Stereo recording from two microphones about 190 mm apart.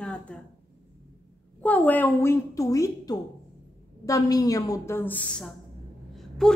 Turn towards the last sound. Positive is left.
turn(degrees=5)  # may be behind; listen again after turning